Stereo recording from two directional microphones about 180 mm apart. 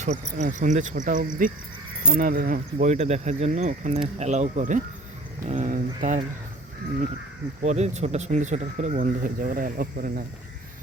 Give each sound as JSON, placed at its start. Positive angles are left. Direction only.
{"t": 0.0, "sound": "speech", "side_deg": -40}
{"t": 7.6, "sound": "speech", "side_deg": -40}